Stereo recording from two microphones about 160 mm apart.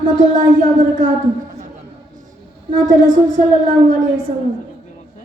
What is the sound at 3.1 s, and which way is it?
A woman's voice, 55° right (ahead or behind).